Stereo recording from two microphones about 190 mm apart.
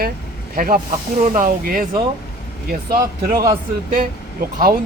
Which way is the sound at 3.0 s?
15° right (ahead or behind).